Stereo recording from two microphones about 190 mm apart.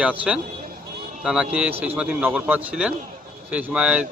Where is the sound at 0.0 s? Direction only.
5° right (ahead or behind).